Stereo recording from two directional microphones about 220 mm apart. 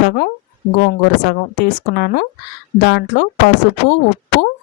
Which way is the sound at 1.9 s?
50° left (ahead or behind).